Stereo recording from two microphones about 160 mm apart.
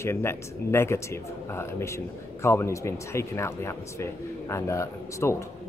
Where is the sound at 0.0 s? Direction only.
15° left (ahead or behind).